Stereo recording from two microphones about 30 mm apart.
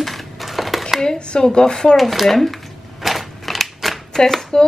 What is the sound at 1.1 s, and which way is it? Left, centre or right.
Speech, left.